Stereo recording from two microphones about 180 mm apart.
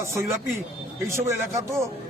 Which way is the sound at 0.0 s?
15° right (ahead or behind).